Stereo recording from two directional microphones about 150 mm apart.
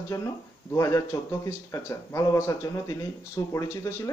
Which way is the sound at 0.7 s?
20° left (ahead or behind).